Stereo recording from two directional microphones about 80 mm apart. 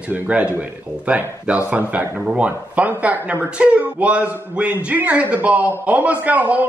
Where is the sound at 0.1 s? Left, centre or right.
Centre.